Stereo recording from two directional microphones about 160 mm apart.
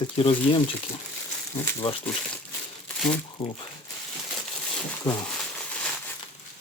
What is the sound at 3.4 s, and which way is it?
Speech, 40° left (ahead or behind).